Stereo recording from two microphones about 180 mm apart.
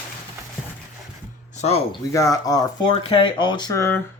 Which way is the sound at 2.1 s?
20° left (ahead or behind).